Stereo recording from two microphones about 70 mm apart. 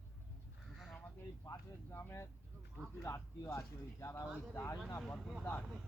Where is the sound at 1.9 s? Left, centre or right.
Left.